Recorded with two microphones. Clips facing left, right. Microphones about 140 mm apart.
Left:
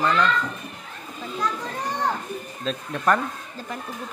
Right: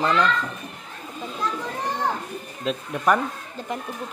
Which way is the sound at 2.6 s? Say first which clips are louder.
Right 1 dB; 10° right (ahead or behind).